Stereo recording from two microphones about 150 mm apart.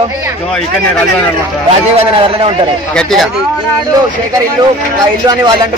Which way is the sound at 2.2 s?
40° right (ahead or behind).